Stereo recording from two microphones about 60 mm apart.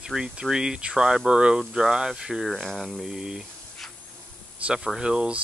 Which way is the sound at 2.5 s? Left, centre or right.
Centre.